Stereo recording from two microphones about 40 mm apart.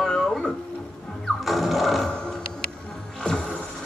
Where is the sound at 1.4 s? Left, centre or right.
Centre.